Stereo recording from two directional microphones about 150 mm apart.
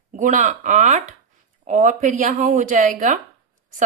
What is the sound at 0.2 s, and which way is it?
A woman's voice, 55° right (ahead or behind).